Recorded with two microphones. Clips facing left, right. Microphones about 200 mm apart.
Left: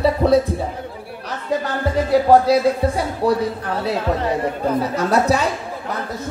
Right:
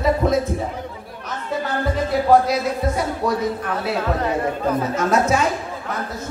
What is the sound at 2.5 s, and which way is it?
A man's voice, 30° left (ahead or behind).